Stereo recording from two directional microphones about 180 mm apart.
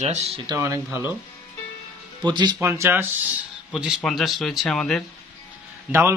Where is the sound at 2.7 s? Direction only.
10° right (ahead or behind); by 5.0 s 5° left (ahead or behind).